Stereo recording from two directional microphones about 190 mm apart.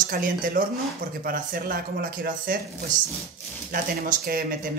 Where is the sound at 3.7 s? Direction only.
50° right (ahead or behind).